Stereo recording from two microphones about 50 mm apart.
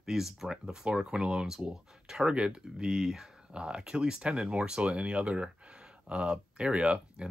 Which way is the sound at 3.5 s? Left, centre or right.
Right.